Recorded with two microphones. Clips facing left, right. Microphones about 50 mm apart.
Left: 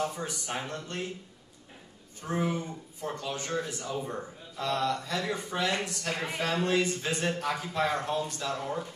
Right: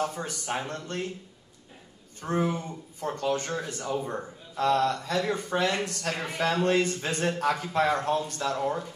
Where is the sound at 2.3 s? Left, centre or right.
Right.